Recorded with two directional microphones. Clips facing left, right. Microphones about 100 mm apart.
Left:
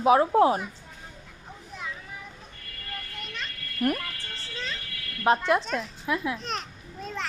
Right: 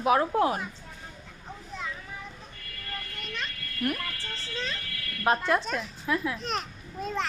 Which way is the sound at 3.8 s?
45° left (ahead or behind).